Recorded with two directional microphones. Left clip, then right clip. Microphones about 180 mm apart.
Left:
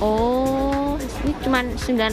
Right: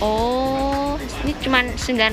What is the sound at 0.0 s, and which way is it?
Music, 25° left (ahead or behind).